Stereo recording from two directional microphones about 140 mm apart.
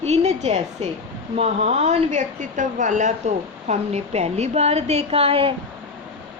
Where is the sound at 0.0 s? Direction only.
50° right (ahead or behind).